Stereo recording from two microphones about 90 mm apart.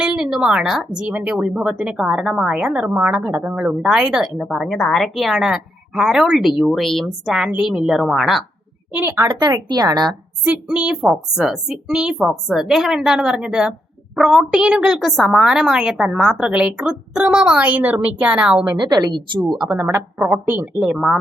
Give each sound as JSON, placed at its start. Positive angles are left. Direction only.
{"t": 0.0, "sound": "a woman's voice", "side_deg": -10}
{"t": 4.4, "sound": "a woman's voice", "side_deg": 5}
{"t": 8.9, "sound": "a woman's voice", "side_deg": -20}
{"t": 9.1, "sound": "a woman's voice", "side_deg": -45}
{"t": 10.4, "sound": "a woman's voice", "side_deg": -15}
{"t": 18.8, "sound": "a woman's voice", "side_deg": -50}
{"t": 19.7, "sound": "speech", "side_deg": -30}
{"t": 20.2, "sound": "speech", "side_deg": -20}
{"t": 20.8, "sound": "a woman's voice", "side_deg": -5}